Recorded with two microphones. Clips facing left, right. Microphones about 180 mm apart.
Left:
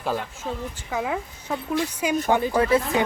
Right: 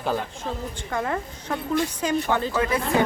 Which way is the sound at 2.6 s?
30° left (ahead or behind).